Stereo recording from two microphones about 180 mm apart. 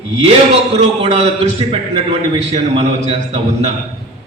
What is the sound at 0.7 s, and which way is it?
A man's voice, 35° right (ahead or behind).